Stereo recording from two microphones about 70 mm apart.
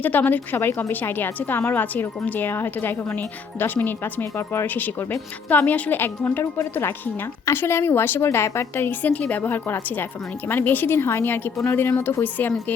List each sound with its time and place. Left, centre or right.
0.0 s a woman's voice: left